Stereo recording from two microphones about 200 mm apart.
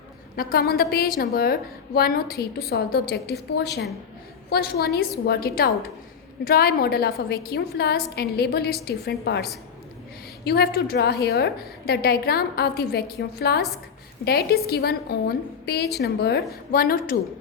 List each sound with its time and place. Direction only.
0.3 s a woman's voice: 50° left (ahead or behind)